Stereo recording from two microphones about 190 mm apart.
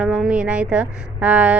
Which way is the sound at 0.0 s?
5° right (ahead or behind).